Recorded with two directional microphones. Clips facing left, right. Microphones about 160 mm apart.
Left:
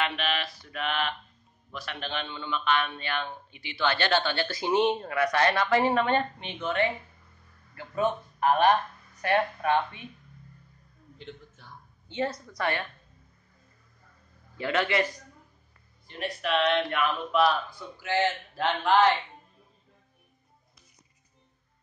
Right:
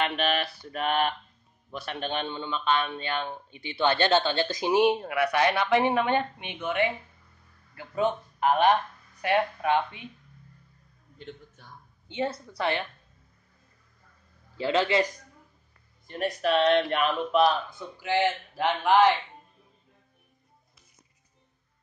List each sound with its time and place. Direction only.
0.0 s mantra: 45° right (ahead or behind)
1.9 s a man's voice: 30° right (ahead or behind); by 10.0 s 15° right (ahead or behind)
11.1 s a man's voice: 45° right (ahead or behind)
12.3 s speech: 25° right (ahead or behind)
14.6 s speech: 25° right (ahead or behind)
16.1 s speech: 40° right (ahead or behind); by 19.1 s 15° right (ahead or behind)